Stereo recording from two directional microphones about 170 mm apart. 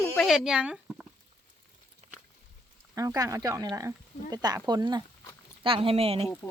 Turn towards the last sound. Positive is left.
turn(degrees=-35)  # may be behind; listen again after turning